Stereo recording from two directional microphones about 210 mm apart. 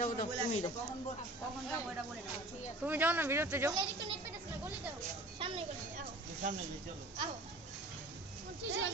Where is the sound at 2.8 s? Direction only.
10° right (ahead or behind).